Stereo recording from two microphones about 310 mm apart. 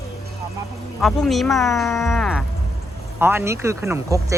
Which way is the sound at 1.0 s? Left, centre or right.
Centre.